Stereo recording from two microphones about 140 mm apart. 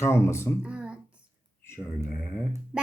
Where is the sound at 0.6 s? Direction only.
10° right (ahead or behind).